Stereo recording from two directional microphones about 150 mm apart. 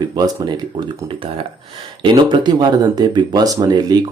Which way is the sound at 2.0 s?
30° right (ahead or behind).